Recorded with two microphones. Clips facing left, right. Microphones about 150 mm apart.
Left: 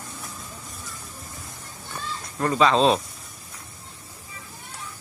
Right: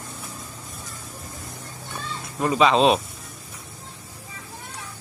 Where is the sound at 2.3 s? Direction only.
15° right (ahead or behind).